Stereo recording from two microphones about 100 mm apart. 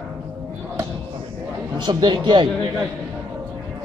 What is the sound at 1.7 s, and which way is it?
Speech, 50° right (ahead or behind).